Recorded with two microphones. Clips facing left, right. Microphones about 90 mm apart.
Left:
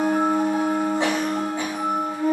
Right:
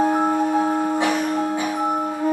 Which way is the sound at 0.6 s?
20° right (ahead or behind).